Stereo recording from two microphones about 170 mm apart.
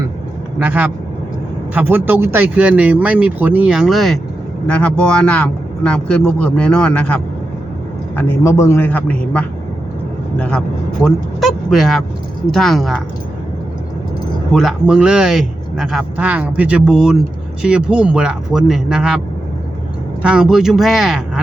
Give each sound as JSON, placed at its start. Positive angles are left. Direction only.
{"t": 0.6, "sound": "speech", "side_deg": -10}
{"t": 14.5, "sound": "speech", "side_deg": 0}
{"t": 20.2, "sound": "speech", "side_deg": -5}